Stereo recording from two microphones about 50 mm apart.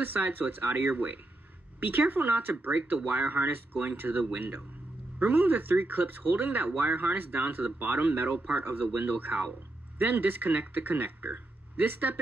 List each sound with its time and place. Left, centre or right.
0.0 s speech: right